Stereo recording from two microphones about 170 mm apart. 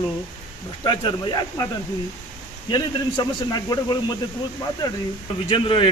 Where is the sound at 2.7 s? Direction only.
25° left (ahead or behind).